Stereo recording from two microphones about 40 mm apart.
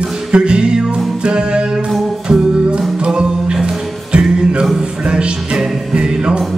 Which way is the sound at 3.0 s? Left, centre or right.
Right.